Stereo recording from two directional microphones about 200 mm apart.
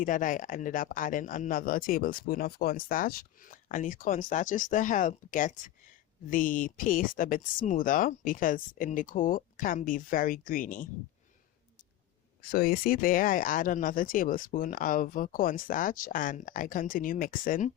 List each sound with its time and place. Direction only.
0.0 s speech: 40° left (ahead or behind)
12.4 s speech: 50° left (ahead or behind)